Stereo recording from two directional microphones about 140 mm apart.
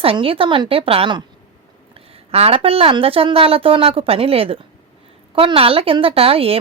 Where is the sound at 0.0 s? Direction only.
40° right (ahead or behind).